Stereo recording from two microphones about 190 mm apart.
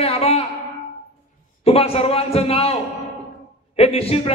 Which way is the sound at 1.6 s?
30° left (ahead or behind).